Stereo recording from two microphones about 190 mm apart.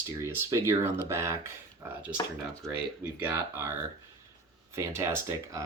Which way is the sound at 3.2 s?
10° right (ahead or behind).